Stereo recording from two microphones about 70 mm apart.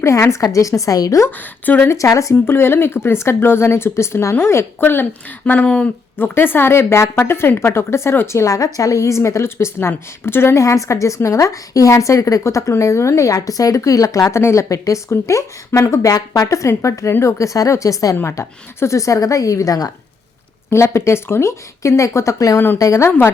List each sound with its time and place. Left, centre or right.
0.0 s a woman's voice: left
1.6 s speech: left
1.9 s a woman's voice: left
2.3 s a woman's voice: left
5.5 s speech: centre
6.1 s a woman's voice: left
8.5 s a woman's voice: left
18.2 s a woman's voice: left
20.7 s a woman's voice: left
22.5 s a woman's voice: left
22.8 s a woman's voice: left